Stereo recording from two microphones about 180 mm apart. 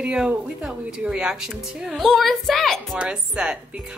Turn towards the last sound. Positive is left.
turn(degrees=-5)  # may be behind; listen again after turning